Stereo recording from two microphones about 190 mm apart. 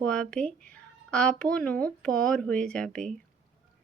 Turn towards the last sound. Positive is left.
turn(degrees=5)  # may be behind; listen again after turning